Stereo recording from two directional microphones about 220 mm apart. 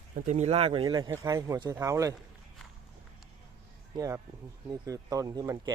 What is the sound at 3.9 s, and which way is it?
Speech, 15° right (ahead or behind).